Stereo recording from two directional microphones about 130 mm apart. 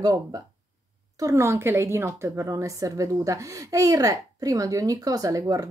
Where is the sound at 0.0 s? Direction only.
30° right (ahead or behind).